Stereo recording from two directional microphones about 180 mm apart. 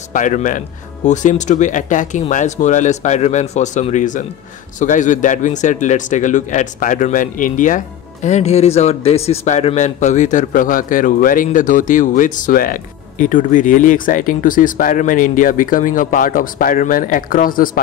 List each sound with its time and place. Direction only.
0.1 s a man's voice: 45° left (ahead or behind)